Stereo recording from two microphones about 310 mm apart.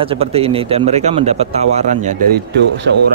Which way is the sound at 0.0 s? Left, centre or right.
Centre.